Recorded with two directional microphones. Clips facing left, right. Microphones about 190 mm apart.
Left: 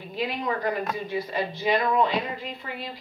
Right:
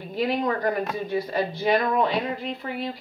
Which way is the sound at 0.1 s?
45° right (ahead or behind).